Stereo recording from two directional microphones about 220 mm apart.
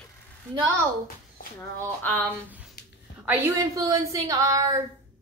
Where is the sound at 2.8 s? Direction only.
45° left (ahead or behind).